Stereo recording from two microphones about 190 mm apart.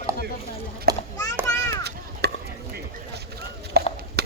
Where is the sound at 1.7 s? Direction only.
60° right (ahead or behind).